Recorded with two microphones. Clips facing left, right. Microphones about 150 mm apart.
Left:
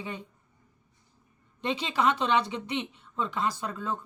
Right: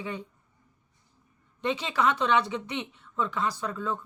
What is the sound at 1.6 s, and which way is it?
Speech, 25° left (ahead or behind).